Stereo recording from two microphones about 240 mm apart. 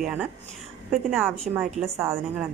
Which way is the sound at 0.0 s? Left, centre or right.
Centre.